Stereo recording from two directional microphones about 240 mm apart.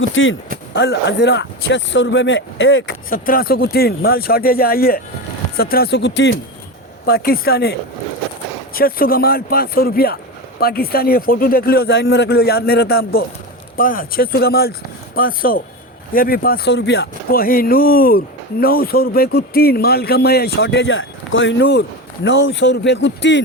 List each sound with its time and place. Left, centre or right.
0.1 s speech: left
3.1 s a man's voice: left